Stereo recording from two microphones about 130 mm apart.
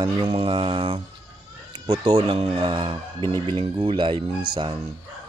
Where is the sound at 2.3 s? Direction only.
45° right (ahead or behind).